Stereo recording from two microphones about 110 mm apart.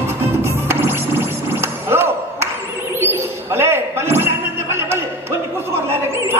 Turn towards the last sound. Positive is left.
turn(degrees=-20)  # may be behind; listen again after turning